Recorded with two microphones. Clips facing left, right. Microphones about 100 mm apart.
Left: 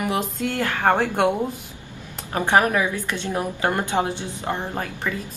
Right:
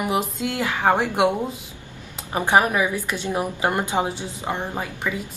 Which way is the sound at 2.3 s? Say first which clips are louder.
Even; 15° right (ahead or behind).